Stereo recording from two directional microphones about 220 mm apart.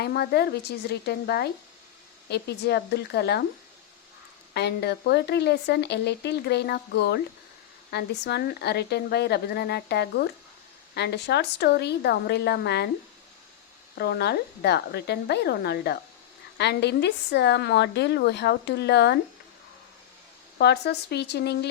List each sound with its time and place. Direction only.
0.0 s speech: 45° left (ahead or behind)
4.5 s speech: 50° left (ahead or behind)
14.0 s speech: 45° left (ahead or behind)
20.6 s speech: 50° left (ahead or behind)